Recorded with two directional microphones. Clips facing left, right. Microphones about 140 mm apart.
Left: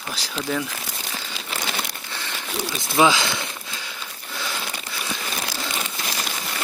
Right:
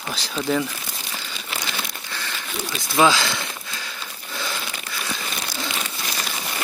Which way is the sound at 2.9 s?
15° left (ahead or behind).